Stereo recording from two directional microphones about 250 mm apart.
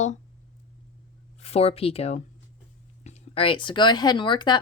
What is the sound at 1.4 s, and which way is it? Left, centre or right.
Speech, left.